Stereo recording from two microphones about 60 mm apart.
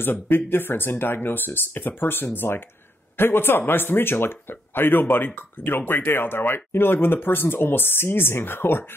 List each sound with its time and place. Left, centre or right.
0.0 s speech: left